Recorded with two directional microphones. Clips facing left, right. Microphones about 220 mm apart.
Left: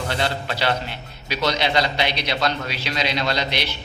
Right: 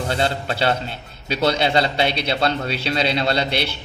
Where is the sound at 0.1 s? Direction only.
25° right (ahead or behind).